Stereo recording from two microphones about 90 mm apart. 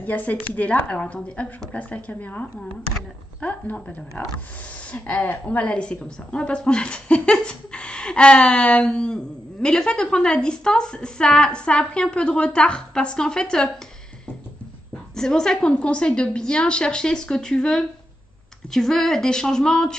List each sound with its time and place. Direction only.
0.0 s a woman's voice: 15° left (ahead or behind)
15.1 s a woman's voice: 5° left (ahead or behind)